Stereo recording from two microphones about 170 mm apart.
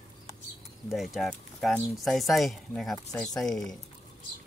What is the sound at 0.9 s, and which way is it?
Speech, centre (ahead or behind).